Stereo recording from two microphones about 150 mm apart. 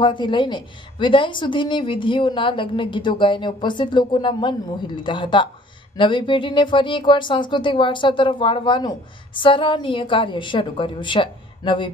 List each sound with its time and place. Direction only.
0.0 s speech: 30° left (ahead or behind)